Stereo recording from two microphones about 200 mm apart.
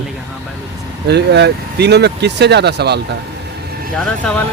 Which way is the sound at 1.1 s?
60° right (ahead or behind).